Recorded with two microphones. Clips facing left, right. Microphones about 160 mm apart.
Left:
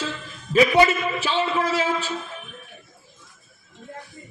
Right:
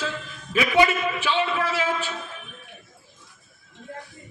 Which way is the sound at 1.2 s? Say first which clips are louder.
Left 2 dB; 40° left (ahead or behind).